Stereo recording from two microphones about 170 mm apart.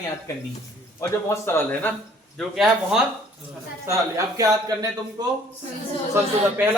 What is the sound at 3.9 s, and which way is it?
Speech, 20° right (ahead or behind).